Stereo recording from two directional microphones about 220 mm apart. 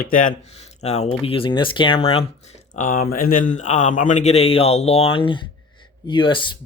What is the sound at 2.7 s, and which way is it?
Speech, 40° left (ahead or behind).